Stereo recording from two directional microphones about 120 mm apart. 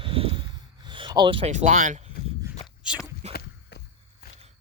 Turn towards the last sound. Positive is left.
turn(degrees=-65)  # may be behind; listen again after turning